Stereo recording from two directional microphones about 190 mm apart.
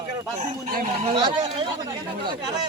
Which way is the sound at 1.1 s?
25° right (ahead or behind).